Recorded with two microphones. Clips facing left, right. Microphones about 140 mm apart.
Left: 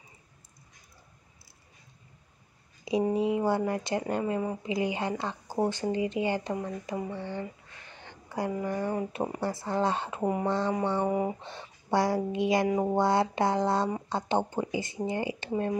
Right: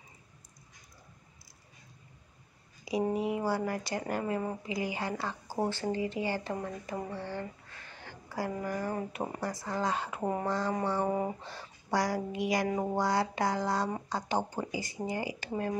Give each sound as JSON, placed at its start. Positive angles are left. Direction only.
{"t": 2.8, "sound": "speech", "side_deg": 25}
{"t": 11.1, "sound": "speech", "side_deg": 10}
{"t": 11.4, "sound": "speech", "side_deg": 25}